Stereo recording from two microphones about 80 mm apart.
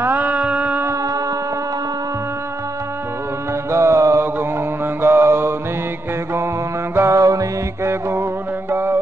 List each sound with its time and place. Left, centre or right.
0.0 s a sound: right
3.7 s mantra: right
7.0 s music: right
7.9 s music: right